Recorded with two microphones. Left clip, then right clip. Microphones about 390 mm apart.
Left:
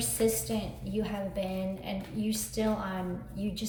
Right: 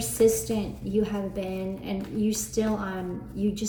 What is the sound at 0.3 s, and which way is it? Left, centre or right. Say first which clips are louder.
A woman's voice: right 7 dB; centre.